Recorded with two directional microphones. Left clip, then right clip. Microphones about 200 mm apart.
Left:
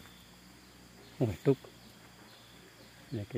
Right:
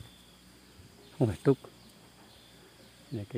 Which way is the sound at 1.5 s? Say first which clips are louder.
Right 2 dB; 35° right (ahead or behind).